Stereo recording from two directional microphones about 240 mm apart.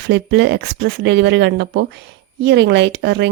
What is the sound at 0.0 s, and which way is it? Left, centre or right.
Speech, right.